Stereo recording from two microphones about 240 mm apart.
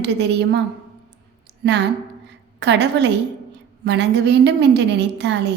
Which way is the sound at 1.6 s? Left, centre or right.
Right.